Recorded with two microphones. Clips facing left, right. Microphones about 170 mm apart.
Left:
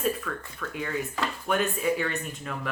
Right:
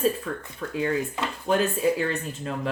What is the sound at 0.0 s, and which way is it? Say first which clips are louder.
Speech: right 4 dB; 35° right (ahead or behind).